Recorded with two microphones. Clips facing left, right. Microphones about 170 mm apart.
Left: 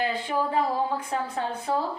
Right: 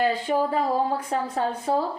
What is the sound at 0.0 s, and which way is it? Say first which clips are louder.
A woman's voice: right 4 dB; 40° right (ahead or behind).